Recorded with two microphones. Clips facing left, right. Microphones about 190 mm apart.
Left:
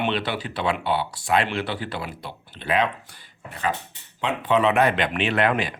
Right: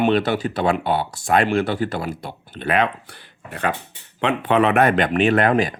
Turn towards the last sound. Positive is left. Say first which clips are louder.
# right 5 dB
turn(degrees=-45)  # may be behind; listen again after turning